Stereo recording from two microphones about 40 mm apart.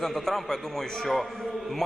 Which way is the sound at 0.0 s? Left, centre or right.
Centre.